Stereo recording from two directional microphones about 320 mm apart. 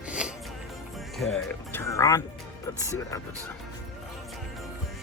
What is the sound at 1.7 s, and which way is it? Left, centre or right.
Music, centre.